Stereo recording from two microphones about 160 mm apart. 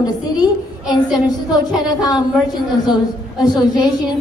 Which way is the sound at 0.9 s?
25° left (ahead or behind).